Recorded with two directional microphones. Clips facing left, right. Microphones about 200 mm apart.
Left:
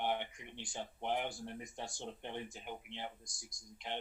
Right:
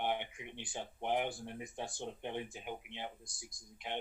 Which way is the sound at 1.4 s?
15° right (ahead or behind).